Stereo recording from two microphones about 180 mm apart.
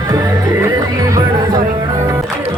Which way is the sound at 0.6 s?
20° right (ahead or behind).